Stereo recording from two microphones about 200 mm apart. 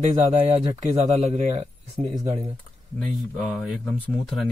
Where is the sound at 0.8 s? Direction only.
35° right (ahead or behind).